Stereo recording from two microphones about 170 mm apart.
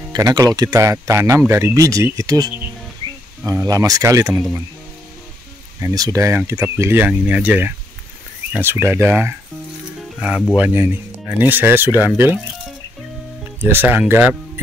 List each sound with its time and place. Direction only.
0.1 s speech: 25° right (ahead or behind)
5.8 s speech: 20° right (ahead or behind)
10.5 s speech: 10° right (ahead or behind)
13.6 s speech: 10° right (ahead or behind)